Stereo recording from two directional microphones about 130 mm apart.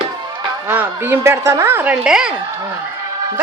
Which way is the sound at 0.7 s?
15° right (ahead or behind).